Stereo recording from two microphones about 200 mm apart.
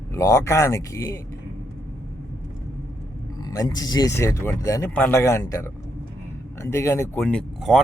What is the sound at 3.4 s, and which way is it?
Speech, 20° left (ahead or behind).